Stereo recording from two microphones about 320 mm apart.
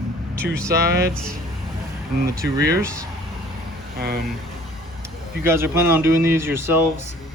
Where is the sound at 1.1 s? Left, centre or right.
Centre.